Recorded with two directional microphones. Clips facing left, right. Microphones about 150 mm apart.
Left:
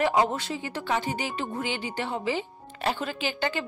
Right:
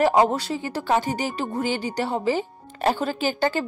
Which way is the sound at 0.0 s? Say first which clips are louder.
Right 5 dB; 40° right (ahead or behind).